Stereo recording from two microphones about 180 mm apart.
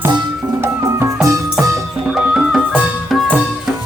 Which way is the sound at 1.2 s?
15° right (ahead or behind).